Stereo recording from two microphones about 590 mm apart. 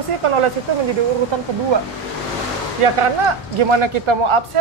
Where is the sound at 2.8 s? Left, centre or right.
Right.